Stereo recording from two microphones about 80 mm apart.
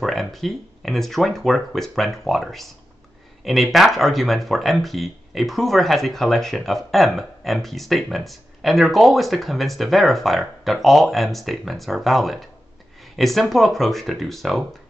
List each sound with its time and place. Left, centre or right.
0.0 s speech: centre